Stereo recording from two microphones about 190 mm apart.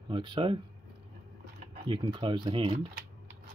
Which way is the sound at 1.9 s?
25° right (ahead or behind).